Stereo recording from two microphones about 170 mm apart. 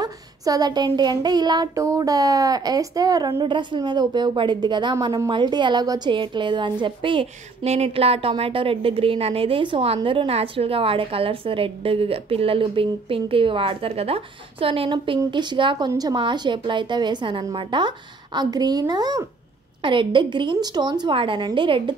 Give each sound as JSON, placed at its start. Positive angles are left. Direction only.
{"t": 0.0, "sound": "child singing", "side_deg": -25}
{"t": 9.9, "sound": "a woman's voice", "side_deg": -30}
{"t": 15.1, "sound": "child singing", "side_deg": -25}